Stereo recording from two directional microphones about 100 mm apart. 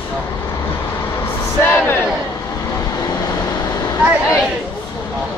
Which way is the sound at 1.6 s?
20° left (ahead or behind).